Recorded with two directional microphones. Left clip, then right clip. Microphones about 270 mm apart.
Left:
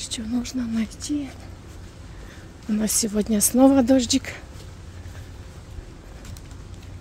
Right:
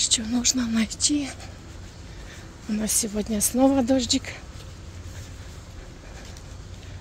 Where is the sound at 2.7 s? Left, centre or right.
Centre.